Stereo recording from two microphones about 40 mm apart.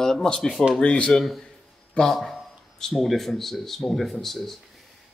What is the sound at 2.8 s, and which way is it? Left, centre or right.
A man's voice, centre.